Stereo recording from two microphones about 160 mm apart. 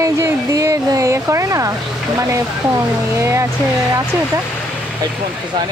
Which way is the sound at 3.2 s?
20° right (ahead or behind).